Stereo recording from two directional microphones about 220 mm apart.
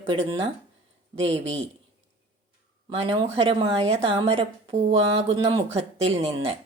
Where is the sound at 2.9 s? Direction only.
25° right (ahead or behind).